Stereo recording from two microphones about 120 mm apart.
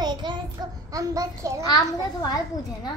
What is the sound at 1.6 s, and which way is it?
Speech, 35° left (ahead or behind).